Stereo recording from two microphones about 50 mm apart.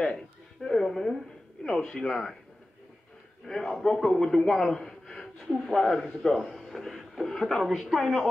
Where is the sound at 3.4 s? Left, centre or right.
Centre.